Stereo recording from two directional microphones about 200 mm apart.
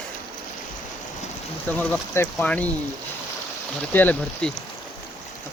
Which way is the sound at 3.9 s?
5° left (ahead or behind).